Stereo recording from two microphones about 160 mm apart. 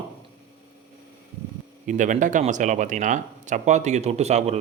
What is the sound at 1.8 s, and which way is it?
Speech, 50° right (ahead or behind).